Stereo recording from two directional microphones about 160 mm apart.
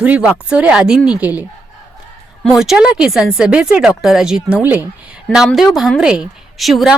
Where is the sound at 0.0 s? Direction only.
5° right (ahead or behind).